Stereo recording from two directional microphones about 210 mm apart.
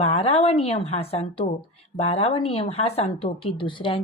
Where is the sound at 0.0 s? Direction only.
30° left (ahead or behind).